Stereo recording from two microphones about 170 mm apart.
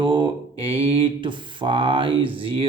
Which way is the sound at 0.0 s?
30° right (ahead or behind).